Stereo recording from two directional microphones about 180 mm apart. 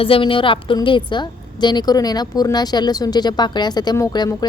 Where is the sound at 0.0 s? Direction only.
30° left (ahead or behind).